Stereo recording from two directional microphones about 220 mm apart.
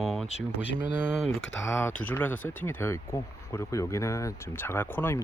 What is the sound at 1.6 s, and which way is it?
Speech, 10° left (ahead or behind).